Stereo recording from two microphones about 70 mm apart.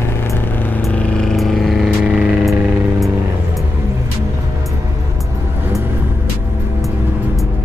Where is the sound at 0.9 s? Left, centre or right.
Centre.